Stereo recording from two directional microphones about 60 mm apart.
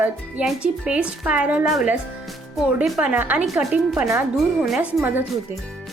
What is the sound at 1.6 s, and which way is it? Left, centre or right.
Speech, centre.